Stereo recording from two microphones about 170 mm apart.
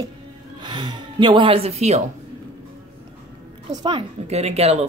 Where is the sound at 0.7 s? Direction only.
30° right (ahead or behind).